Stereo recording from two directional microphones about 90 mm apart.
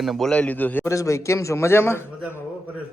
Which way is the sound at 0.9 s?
35° left (ahead or behind).